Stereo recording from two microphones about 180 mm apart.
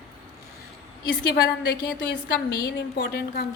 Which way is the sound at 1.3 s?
65° left (ahead or behind).